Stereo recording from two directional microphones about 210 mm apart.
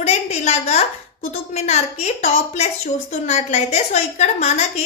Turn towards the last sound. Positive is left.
turn(degrees=35)  # may be behind; listen again after turning